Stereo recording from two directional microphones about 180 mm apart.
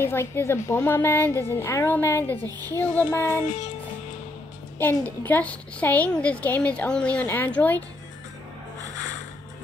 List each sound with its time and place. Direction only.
0.0 s a child's voice: 15° left (ahead or behind)
3.4 s music: 40° left (ahead or behind)
4.7 s a child's voice: 10° left (ahead or behind)